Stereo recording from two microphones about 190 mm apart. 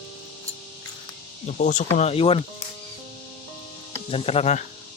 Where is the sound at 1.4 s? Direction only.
40° left (ahead or behind).